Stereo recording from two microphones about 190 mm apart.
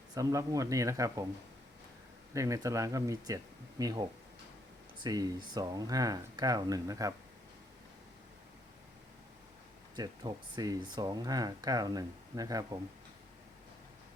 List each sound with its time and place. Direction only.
0.1 s speech: 15° right (ahead or behind)
2.3 s speech: 15° right (ahead or behind)
5.0 s speech: 20° right (ahead or behind)
9.9 s speech: 25° right (ahead or behind)